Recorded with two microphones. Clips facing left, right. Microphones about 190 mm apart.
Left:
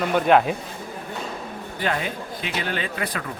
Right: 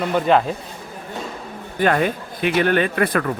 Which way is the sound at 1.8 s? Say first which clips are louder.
Right 8 dB; 55° right (ahead or behind).